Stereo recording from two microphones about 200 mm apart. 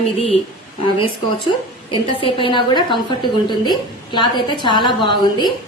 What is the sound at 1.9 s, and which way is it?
A woman's voice, 25° left (ahead or behind).